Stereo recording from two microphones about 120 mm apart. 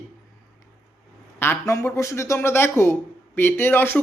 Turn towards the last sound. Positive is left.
turn(degrees=20)  # may be behind; listen again after turning